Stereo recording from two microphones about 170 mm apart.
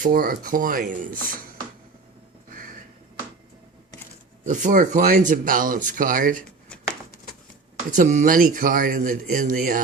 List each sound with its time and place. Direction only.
0.0 s speech: 60° right (ahead or behind)
2.5 s a sound: 55° right (ahead or behind)
4.4 s speech: 50° right (ahead or behind)
7.9 s speech: 45° right (ahead or behind)